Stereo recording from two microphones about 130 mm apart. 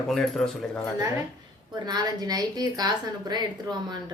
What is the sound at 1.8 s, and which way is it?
A woman's voice, 30° right (ahead or behind).